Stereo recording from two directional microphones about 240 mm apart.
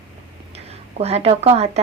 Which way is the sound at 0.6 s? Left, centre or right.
Right.